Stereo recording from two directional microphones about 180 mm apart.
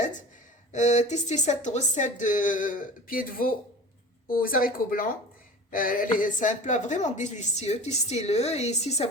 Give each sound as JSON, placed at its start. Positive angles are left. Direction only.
{"t": 0.7, "sound": "speech", "side_deg": 40}